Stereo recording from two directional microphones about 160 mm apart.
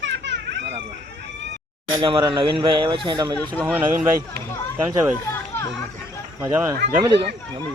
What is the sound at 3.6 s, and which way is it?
Speech, 15° right (ahead or behind).